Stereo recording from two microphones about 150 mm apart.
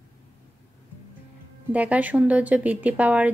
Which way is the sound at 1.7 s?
10° right (ahead or behind).